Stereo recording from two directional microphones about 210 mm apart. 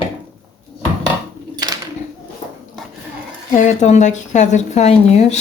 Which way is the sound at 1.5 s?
20° right (ahead or behind).